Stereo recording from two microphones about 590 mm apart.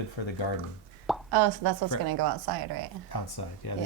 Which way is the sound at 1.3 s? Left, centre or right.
Right.